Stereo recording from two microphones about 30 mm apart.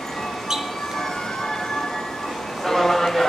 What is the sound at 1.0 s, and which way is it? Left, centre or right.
Music, centre.